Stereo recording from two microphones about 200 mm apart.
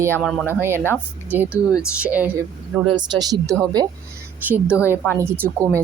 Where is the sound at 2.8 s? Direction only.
20° right (ahead or behind).